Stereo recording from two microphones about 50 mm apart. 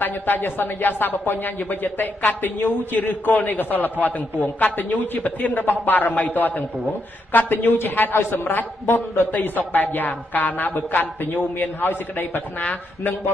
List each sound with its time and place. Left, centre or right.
0.0 s a man's voice: left
9.3 s a man's voice: left